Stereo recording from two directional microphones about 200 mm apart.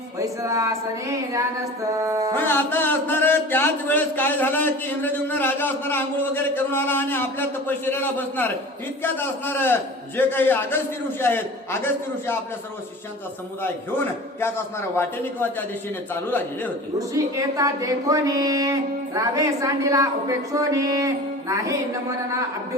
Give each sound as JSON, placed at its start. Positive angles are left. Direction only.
{"t": 0.2, "sound": "speech", "side_deg": -15}
{"t": 2.3, "sound": "speech", "side_deg": 10}
{"t": 17.2, "sound": "speech", "side_deg": -15}